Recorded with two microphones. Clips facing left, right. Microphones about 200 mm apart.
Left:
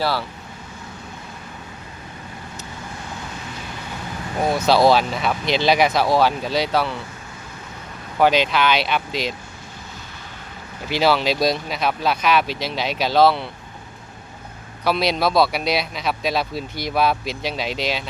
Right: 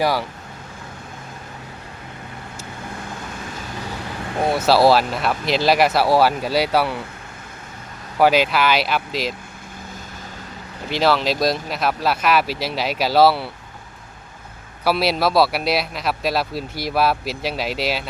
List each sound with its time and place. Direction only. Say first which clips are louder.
0.0 s speech: right 3 dB; 15° right (ahead or behind)
4.5 s speech: right 1 dB; 5° right (ahead or behind)
8.2 s speech: right 1 dB; 5° right (ahead or behind)
10.9 s speech: even; centre (ahead or behind)
14.8 s speech: right 1 dB; 5° right (ahead or behind)